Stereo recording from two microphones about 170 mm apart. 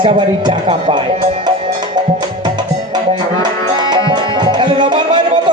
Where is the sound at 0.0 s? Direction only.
35° right (ahead or behind).